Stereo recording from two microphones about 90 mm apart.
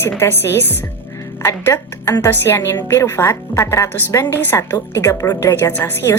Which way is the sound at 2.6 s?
45° left (ahead or behind).